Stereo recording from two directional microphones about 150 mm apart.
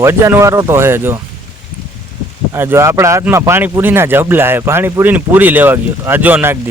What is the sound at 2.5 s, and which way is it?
Speech, 15° right (ahead or behind).